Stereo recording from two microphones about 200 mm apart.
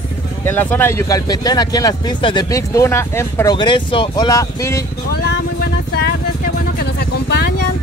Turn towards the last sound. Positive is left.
turn(degrees=55)  # may be behind; listen again after turning